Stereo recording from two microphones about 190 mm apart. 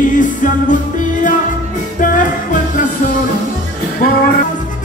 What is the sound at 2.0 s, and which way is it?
Music, 45° left (ahead or behind).